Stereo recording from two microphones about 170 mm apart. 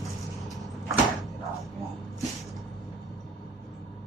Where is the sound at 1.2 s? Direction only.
Centre (ahead or behind).